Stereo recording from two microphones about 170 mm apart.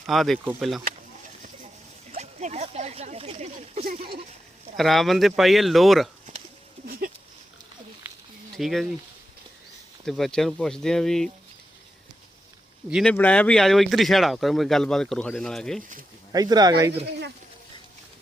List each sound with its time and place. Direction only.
0.1 s speech: centre (ahead or behind)
2.1 s speech: 40° right (ahead or behind)
4.8 s speech: centre (ahead or behind)
8.5 s speech: centre (ahead or behind)
10.1 s speech: centre (ahead or behind)
12.9 s speech: centre (ahead or behind)
16.3 s speech: 25° right (ahead or behind)